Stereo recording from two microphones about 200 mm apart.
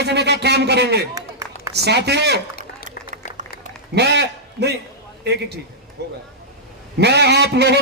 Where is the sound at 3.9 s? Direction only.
55° right (ahead or behind).